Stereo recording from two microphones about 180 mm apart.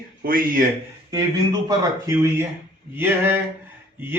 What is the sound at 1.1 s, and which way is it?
Mantra, 20° right (ahead or behind).